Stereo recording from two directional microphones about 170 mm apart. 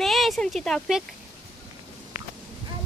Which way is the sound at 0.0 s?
Centre (ahead or behind).